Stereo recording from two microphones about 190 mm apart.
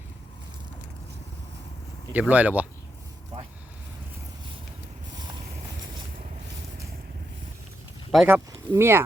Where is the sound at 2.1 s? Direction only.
10° right (ahead or behind).